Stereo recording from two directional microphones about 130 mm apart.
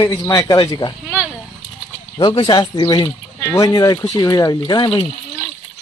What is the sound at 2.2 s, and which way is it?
Speech, 40° left (ahead or behind).